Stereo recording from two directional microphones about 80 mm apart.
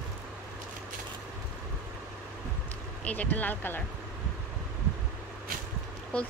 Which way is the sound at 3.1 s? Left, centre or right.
Centre.